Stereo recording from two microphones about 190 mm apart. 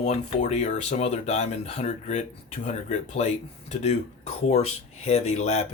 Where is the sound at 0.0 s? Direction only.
35° left (ahead or behind).